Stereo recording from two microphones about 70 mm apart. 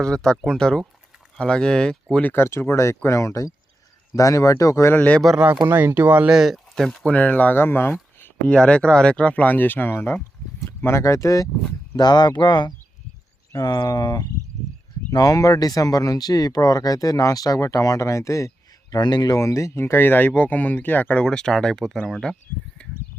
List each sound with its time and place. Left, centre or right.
0.0 s speech: centre
2.2 s speech: left
4.9 s speech: centre
5.6 s speech: right
6.1 s speech: centre; by 7.9 s left
8.4 s speech: centre; by 10.2 s left
10.8 s speech: left
11.9 s speech: left
13.7 s speech: left
18.9 s speech: left
21.2 s speech: centre